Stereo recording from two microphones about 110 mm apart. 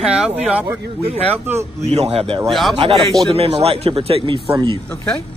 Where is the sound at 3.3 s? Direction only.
70° right (ahead or behind).